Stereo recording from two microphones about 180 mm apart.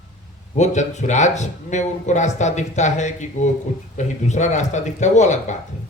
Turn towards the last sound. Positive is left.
turn(degrees=40)  # may be behind; listen again after turning